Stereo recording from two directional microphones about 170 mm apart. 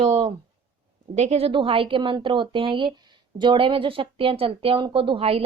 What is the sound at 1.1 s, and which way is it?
Speech, 40° right (ahead or behind).